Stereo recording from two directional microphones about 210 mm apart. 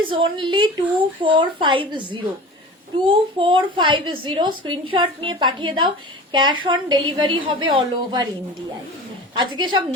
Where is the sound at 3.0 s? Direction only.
25° right (ahead or behind).